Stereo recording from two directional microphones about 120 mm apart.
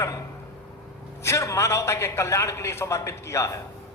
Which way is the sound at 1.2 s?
25° left (ahead or behind).